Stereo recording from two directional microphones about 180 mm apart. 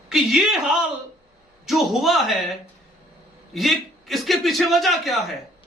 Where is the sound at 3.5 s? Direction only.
Centre (ahead or behind).